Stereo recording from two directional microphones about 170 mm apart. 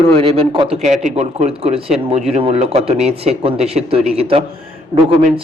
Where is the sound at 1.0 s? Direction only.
40° right (ahead or behind).